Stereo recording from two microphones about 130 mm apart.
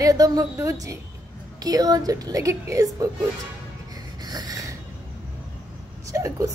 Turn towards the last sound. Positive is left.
turn(degrees=-25)  # may be behind; listen again after turning